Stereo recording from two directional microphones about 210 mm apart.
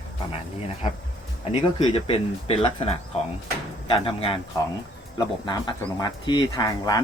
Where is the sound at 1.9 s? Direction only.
25° left (ahead or behind).